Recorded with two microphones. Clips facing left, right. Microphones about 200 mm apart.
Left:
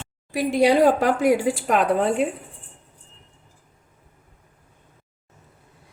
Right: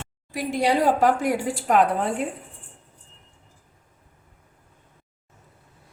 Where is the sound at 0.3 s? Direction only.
70° left (ahead or behind).